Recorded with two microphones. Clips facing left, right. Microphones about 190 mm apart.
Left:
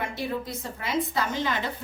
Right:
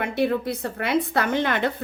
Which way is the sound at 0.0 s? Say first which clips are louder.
Right 8 dB; 65° right (ahead or behind).